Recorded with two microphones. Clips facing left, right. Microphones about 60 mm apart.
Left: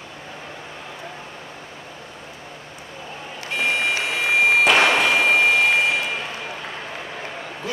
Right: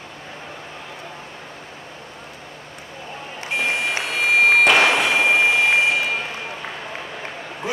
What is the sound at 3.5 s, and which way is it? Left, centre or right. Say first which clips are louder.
Vehicle: even; centre.